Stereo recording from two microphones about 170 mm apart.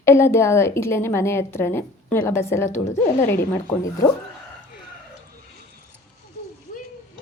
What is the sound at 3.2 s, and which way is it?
Speech, 15° left (ahead or behind).